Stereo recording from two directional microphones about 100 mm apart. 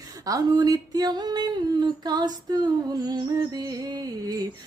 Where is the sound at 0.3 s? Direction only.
40° right (ahead or behind).